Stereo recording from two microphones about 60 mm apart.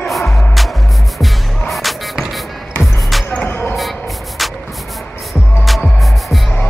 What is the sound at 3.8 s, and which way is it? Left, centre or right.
Shuffle, centre.